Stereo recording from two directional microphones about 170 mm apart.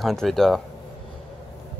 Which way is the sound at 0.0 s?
Centre (ahead or behind).